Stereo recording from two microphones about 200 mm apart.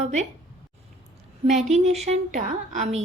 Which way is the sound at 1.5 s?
35° right (ahead or behind).